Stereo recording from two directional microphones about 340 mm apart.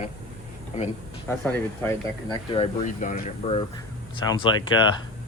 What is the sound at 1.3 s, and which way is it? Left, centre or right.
Speech, centre.